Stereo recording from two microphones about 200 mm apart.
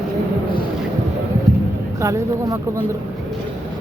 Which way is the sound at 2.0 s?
15° right (ahead or behind).